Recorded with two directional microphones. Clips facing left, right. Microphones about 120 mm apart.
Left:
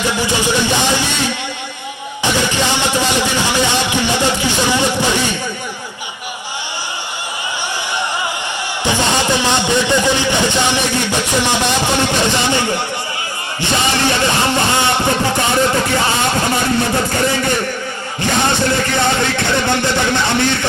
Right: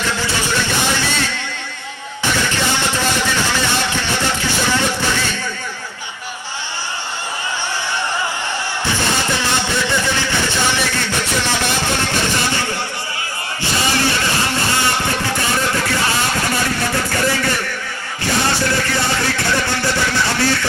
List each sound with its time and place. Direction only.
0.0 s speech: 15° left (ahead or behind)
2.4 s speech: 15° left (ahead or behind)
8.8 s speech: 15° left (ahead or behind)
20.2 s speech: 20° left (ahead or behind)